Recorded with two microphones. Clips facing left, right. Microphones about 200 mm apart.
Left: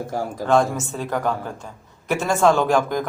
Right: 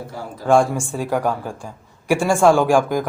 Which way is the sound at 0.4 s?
10° right (ahead or behind).